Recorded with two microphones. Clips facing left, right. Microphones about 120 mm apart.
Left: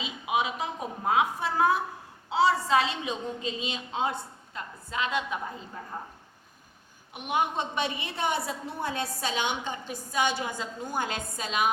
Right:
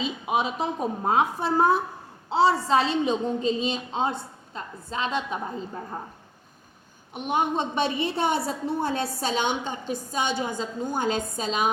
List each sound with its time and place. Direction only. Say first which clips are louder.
0.0 s a woman's voice: right 3 dB; 30° right (ahead or behind)
7.1 s a woman's voice: right 3 dB; 30° right (ahead or behind)